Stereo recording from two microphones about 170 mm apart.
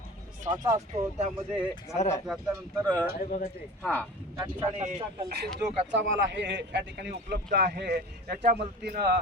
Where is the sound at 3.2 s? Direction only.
55° left (ahead or behind).